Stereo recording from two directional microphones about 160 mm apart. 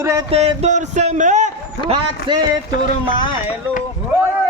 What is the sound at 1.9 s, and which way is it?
Speech, 30° right (ahead or behind).